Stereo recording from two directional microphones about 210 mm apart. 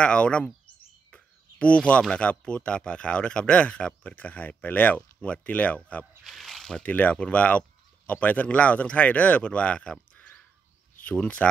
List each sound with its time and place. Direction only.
0.0 s speech: 5° left (ahead or behind)